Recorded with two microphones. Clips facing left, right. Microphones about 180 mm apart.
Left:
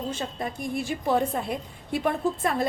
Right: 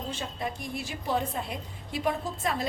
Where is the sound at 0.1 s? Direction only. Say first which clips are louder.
Left 3 dB; 45° left (ahead or behind).